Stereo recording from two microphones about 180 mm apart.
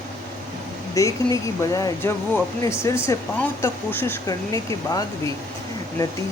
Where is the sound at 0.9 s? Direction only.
20° left (ahead or behind).